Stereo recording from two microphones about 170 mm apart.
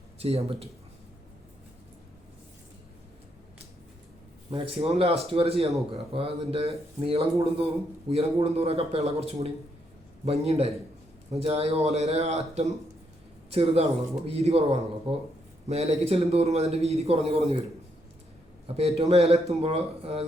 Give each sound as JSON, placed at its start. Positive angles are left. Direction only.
{"t": 0.2, "sound": "a man's voice", "side_deg": -35}
{"t": 4.5, "sound": "a man's voice", "side_deg": -35}
{"t": 18.8, "sound": "a man's voice", "side_deg": -35}